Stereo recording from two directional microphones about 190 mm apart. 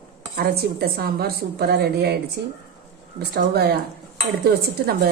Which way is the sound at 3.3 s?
55° right (ahead or behind).